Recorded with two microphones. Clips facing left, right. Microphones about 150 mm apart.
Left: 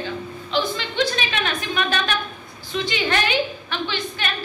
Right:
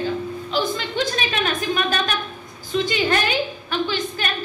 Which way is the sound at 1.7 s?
40° right (ahead or behind).